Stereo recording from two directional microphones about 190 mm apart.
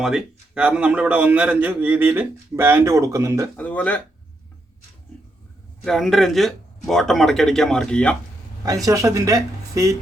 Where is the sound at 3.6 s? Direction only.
10° left (ahead or behind).